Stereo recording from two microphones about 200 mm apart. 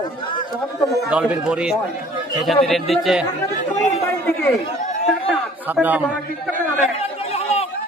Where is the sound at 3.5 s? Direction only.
35° left (ahead or behind).